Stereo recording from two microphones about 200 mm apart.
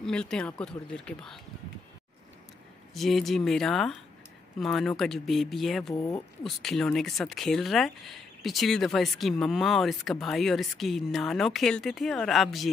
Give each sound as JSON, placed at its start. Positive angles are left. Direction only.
{"t": 0.0, "sound": "speech", "side_deg": 5}
{"t": 2.9, "sound": "speech", "side_deg": 0}
{"t": 5.9, "sound": "speech", "side_deg": 15}
{"t": 6.4, "sound": "speech", "side_deg": 0}